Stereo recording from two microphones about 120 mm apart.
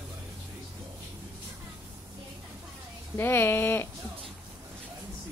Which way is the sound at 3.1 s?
20° left (ahead or behind).